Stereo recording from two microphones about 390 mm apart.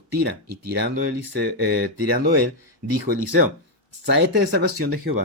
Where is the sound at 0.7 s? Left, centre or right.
Right.